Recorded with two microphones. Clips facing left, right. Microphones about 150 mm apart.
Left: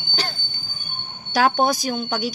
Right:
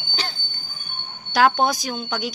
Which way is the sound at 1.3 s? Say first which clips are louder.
Even; 45° left (ahead or behind).